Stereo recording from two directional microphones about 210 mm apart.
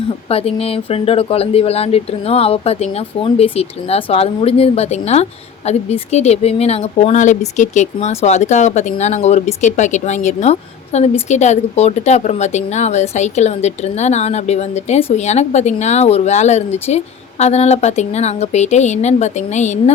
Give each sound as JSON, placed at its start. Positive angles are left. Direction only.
{"t": 0.3, "sound": "speech", "side_deg": 30}